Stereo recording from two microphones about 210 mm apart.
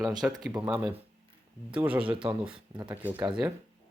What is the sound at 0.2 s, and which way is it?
Speech, 5° right (ahead or behind).